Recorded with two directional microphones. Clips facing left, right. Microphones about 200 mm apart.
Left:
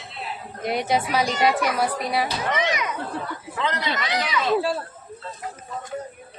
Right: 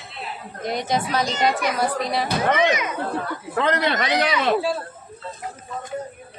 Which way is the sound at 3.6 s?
55° right (ahead or behind).